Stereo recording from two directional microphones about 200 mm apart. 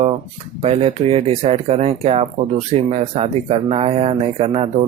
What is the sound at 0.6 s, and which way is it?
Speech, 30° right (ahead or behind).